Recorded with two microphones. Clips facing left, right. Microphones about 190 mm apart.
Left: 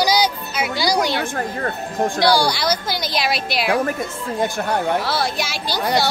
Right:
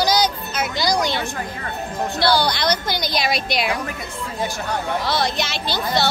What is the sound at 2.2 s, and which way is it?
A woman's voice, 10° left (ahead or behind).